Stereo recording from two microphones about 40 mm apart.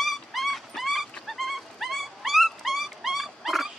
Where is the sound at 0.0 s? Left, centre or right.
Centre.